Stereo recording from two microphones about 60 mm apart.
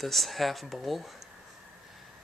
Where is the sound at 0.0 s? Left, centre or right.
Centre.